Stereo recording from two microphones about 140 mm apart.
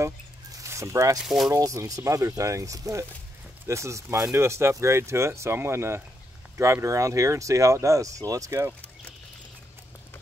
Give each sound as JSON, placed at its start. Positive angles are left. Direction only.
{"t": 0.6, "sound": "zipper", "side_deg": -20}
{"t": 1.1, "sound": "speech", "side_deg": 0}
{"t": 1.5, "sound": "speech", "side_deg": -25}